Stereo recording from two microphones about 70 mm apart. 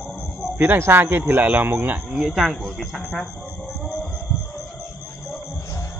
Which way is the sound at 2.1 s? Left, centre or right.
Centre.